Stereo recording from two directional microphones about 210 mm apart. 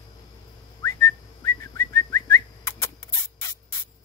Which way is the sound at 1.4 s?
15° left (ahead or behind).